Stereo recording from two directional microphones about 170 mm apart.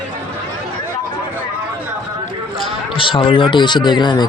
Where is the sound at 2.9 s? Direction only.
30° left (ahead or behind).